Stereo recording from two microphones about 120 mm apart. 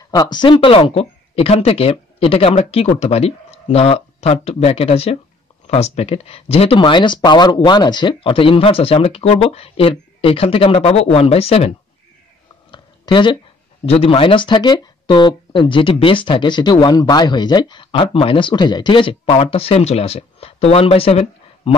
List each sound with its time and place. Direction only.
0.1 s speech: 35° left (ahead or behind); by 6.8 s 55° left (ahead or behind)
6.8 s speech: 40° left (ahead or behind)
12.7 s a sound: 40° left (ahead or behind)
13.8 s speech: 55° left (ahead or behind)